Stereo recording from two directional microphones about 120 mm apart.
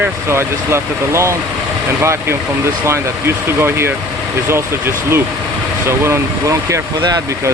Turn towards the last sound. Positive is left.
turn(degrees=-25)  # may be behind; listen again after turning